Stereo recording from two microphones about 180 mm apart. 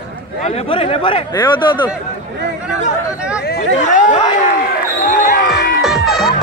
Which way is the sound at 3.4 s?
50° left (ahead or behind).